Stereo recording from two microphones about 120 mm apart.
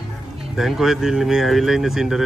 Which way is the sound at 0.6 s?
5° right (ahead or behind).